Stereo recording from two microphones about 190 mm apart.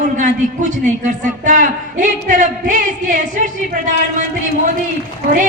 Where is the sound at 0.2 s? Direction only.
40° right (ahead or behind).